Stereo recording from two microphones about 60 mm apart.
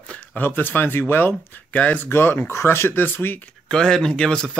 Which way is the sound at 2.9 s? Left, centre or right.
Left.